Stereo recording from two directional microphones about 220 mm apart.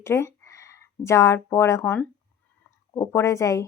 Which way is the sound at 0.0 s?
10° left (ahead or behind).